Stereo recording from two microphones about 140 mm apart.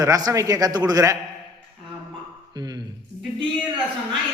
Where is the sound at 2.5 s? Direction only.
30° right (ahead or behind).